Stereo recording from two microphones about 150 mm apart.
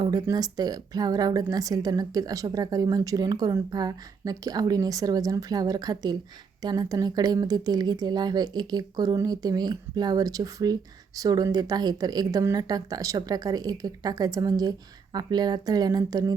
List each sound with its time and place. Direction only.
0.0 s a woman's voice: 25° right (ahead or behind)